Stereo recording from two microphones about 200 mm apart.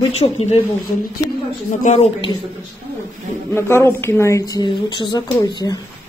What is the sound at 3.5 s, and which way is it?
A woman's voice, 15° left (ahead or behind).